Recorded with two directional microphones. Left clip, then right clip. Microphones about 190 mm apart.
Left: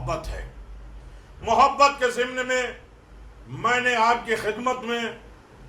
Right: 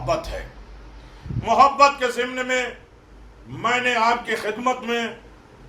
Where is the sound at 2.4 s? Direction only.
5° right (ahead or behind).